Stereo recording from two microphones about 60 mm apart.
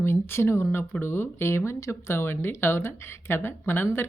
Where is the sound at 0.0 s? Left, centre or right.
Left.